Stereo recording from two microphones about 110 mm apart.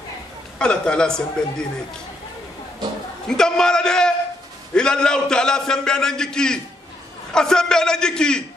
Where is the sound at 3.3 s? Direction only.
5° left (ahead or behind).